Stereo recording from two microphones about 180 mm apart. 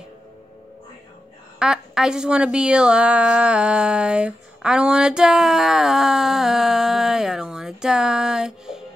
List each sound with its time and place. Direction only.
1.6 s a woman's voice: 5° right (ahead or behind)